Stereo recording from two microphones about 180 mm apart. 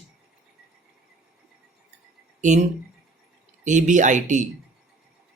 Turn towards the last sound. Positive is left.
turn(degrees=-45)  # may be behind; listen again after turning